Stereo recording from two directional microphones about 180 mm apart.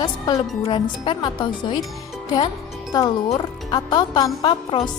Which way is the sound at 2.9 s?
20° left (ahead or behind).